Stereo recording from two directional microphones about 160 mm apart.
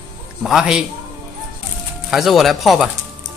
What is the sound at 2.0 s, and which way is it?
Speech, centre (ahead or behind).